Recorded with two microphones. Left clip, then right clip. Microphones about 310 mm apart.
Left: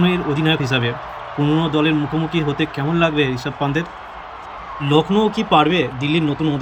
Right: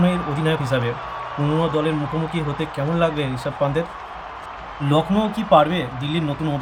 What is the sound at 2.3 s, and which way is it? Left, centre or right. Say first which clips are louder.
Speech: left 5 dB; centre.